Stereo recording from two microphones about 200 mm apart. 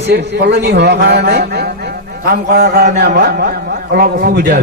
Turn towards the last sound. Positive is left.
turn(degrees=-50)  # may be behind; listen again after turning